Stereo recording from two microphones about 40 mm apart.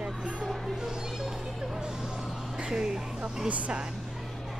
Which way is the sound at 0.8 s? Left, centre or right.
Centre.